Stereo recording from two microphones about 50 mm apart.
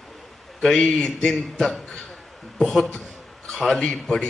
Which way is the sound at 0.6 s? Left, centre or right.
Centre.